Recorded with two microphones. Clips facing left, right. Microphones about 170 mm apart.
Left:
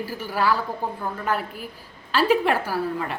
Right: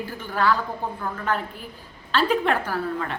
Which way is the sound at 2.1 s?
5° left (ahead or behind).